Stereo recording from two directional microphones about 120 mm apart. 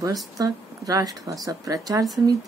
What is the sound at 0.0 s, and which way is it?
A woman's voice, 30° right (ahead or behind).